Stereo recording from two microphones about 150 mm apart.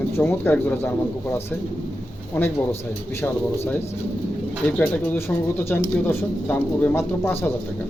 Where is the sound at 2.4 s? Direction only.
15° left (ahead or behind).